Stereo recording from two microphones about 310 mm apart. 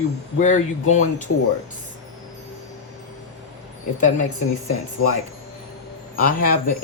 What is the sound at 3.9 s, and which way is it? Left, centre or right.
Speech, left.